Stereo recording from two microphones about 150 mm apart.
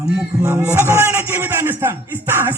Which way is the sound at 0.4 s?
15° right (ahead or behind).